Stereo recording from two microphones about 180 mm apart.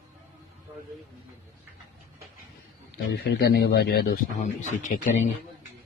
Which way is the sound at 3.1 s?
70° left (ahead or behind).